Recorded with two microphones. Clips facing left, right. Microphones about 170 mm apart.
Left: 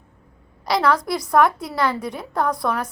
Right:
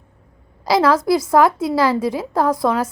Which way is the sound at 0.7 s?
25° right (ahead or behind).